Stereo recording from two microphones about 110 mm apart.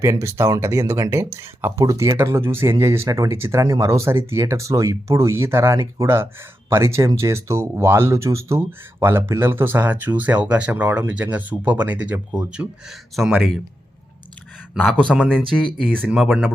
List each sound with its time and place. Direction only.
0.0 s speech: 25° right (ahead or behind)
1.8 s speech: 35° right (ahead or behind)
2.1 s speech: 20° right (ahead or behind); by 13.6 s centre (ahead or behind)
15.1 s speech: centre (ahead or behind)